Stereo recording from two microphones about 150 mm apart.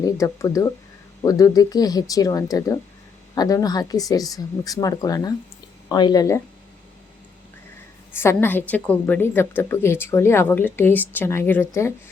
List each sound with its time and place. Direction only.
0.0 s speech: 25° left (ahead or behind)
8.1 s a woman's voice: 15° left (ahead or behind)